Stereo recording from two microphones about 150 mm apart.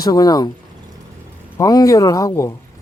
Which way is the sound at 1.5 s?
25° left (ahead or behind).